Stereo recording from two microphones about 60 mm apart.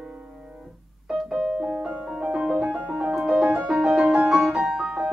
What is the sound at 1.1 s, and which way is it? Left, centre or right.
Music, centre.